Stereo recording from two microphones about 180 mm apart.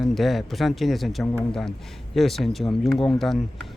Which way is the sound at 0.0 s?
Centre (ahead or behind).